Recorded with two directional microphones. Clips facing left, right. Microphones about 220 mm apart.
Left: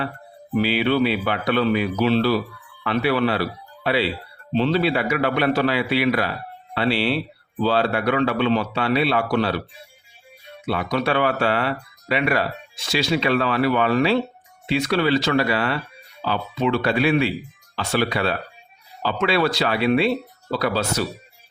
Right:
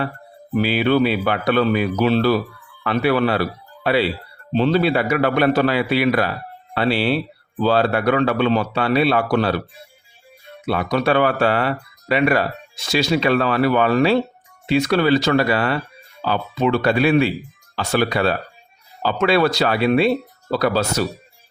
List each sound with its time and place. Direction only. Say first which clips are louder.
0.6 s a man's voice: right 3 dB; 45° right (ahead or behind)
4.5 s a man's voice: right 3 dB; 45° right (ahead or behind)
10.7 s a man's voice: right 3 dB; 45° right (ahead or behind)